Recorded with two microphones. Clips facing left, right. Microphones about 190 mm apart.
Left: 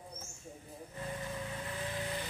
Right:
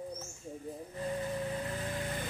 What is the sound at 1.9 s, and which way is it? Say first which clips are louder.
Vehicle: right 2 dB; 50° right (ahead or behind).